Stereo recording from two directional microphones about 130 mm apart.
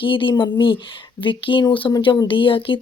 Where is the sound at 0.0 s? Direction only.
40° left (ahead or behind).